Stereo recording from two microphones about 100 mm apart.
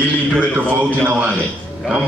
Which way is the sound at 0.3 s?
15° right (ahead or behind).